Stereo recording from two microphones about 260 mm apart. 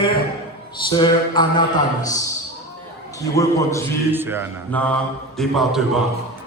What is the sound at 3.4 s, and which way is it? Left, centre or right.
Speech, centre.